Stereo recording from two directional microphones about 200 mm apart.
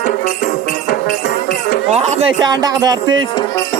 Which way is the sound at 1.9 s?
35° right (ahead or behind).